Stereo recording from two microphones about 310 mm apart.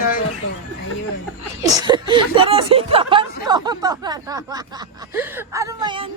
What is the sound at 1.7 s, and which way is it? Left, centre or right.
Speech, centre.